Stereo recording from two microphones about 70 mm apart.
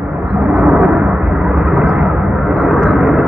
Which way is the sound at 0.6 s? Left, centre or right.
Centre.